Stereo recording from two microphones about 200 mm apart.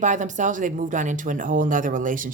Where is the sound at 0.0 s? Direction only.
40° right (ahead or behind).